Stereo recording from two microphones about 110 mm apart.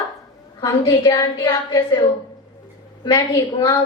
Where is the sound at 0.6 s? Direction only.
40° left (ahead or behind).